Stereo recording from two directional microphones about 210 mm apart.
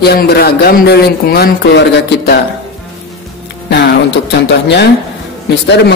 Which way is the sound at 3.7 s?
55° left (ahead or behind).